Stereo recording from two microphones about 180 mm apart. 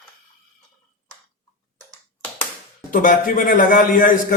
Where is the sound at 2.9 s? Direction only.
50° left (ahead or behind).